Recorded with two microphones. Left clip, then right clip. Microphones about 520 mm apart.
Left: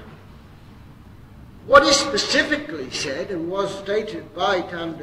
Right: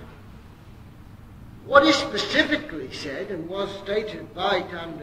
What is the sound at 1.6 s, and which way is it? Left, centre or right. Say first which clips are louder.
Speech: left 3 dB; left.